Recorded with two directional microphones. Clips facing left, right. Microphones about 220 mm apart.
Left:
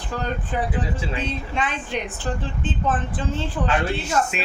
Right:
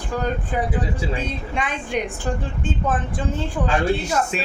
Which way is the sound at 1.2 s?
10° right (ahead or behind).